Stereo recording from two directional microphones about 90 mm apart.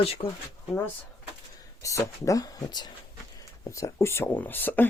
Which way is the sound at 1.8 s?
35° left (ahead or behind).